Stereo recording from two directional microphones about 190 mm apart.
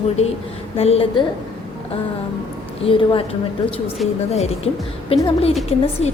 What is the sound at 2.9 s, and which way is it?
A woman's voice, 30° left (ahead or behind).